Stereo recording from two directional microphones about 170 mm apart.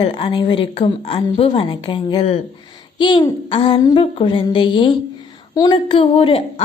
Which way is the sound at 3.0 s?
30° left (ahead or behind).